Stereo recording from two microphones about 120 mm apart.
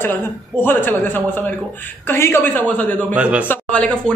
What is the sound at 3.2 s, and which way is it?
Speech, 10° right (ahead or behind).